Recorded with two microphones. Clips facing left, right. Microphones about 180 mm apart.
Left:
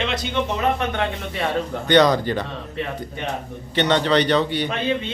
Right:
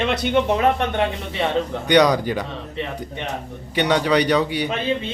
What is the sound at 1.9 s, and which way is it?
Speech, 10° right (ahead or behind).